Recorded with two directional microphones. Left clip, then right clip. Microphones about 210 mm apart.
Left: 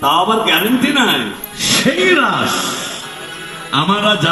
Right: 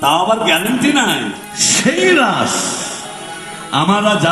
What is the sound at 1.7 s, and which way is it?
Speech, 25° right (ahead or behind).